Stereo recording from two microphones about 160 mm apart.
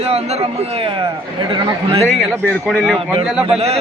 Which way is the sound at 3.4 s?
40° right (ahead or behind).